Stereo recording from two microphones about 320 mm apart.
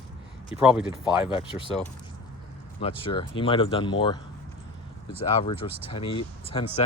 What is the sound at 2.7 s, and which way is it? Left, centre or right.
Speech, centre.